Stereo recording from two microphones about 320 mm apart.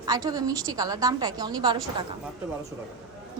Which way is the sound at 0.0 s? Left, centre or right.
Centre.